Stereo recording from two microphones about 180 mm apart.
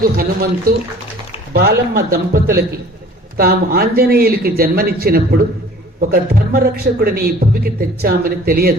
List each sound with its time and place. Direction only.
0.0 s a man's voice: 55° right (ahead or behind)